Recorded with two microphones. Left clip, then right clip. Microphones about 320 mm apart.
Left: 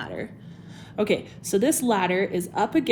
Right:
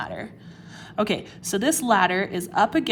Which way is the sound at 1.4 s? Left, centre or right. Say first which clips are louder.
Right 1 dB; right.